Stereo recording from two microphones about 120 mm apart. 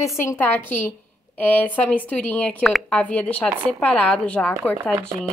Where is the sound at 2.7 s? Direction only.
Centre (ahead or behind).